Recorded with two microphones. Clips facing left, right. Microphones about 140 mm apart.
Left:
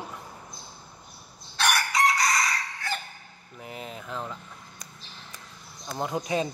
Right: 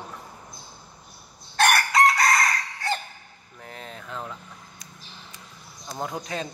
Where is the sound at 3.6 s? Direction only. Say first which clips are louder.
Left 2 dB; 5° left (ahead or behind).